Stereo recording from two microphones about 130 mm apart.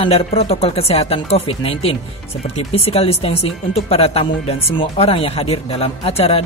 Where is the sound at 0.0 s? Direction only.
50° left (ahead or behind).